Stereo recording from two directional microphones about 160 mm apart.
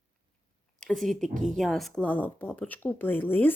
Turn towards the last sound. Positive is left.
turn(degrees=10)  # may be behind; listen again after turning